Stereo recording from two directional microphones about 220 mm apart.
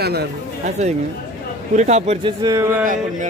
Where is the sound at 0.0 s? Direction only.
45° right (ahead or behind).